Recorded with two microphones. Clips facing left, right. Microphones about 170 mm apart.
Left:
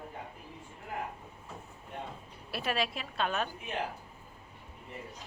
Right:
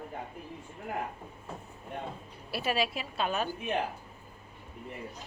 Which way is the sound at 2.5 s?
5° right (ahead or behind).